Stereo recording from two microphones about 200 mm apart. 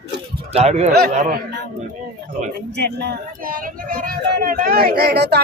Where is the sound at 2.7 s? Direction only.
60° right (ahead or behind).